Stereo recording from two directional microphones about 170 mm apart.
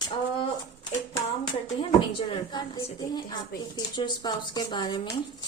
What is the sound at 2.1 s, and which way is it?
A woman's voice, 30° left (ahead or behind).